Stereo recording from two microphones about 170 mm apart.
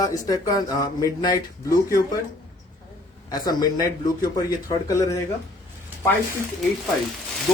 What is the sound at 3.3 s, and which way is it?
Speech, 25° left (ahead or behind).